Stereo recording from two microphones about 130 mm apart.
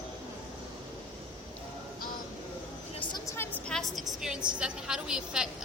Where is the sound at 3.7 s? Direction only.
Centre (ahead or behind).